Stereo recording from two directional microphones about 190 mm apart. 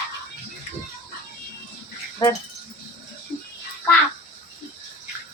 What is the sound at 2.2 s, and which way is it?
Speech, 20° left (ahead or behind).